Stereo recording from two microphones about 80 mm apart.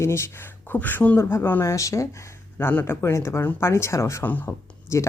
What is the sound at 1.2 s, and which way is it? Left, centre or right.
Speech, left.